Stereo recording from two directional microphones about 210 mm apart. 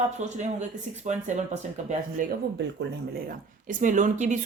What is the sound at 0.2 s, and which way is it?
A woman's voice, 35° right (ahead or behind).